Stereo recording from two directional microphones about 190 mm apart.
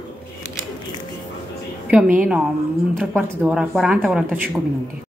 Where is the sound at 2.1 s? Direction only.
5° right (ahead or behind).